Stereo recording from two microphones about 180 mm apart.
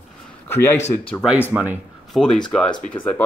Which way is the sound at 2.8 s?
45° left (ahead or behind).